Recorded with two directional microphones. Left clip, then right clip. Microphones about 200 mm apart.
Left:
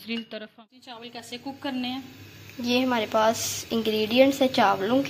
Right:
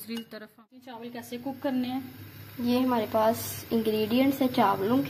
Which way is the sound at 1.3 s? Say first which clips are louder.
Right 2 dB; 35° right (ahead or behind).